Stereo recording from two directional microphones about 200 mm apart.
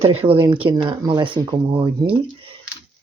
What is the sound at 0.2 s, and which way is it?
Speech, 25° right (ahead or behind).